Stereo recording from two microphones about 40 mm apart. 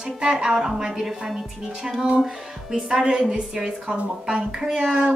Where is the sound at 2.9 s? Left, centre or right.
Right.